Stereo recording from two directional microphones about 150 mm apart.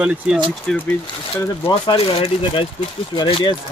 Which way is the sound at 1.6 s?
35° left (ahead or behind).